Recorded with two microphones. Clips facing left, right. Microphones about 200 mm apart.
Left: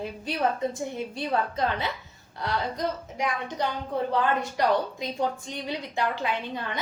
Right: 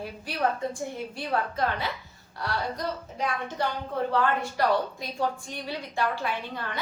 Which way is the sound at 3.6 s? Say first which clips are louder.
Left 1 dB; 15° left (ahead or behind).